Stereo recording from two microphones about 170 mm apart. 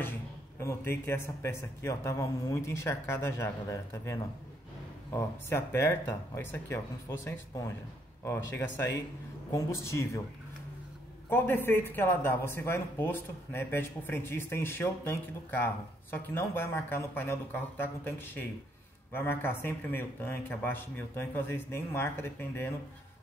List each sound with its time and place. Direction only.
0.6 s speech: 15° left (ahead or behind)
11.2 s speech: 10° left (ahead or behind)